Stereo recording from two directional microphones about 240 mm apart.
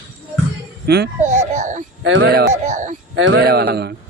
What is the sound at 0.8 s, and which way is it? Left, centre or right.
Speech, right.